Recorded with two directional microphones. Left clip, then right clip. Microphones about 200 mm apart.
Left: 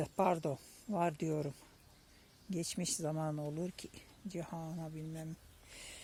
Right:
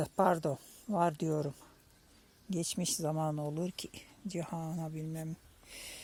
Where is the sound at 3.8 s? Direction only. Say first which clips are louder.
Right 6 dB; 30° right (ahead or behind).